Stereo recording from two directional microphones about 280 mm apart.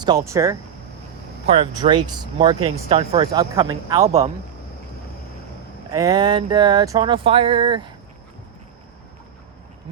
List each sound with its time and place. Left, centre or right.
0.0 s speech: centre
5.9 s speech: centre